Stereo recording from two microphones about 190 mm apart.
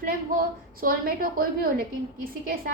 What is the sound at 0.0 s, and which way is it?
A woman's voice, 50° right (ahead or behind).